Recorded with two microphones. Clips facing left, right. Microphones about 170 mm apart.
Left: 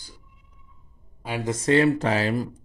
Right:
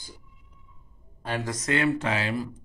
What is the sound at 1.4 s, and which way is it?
Speech, 30° left (ahead or behind).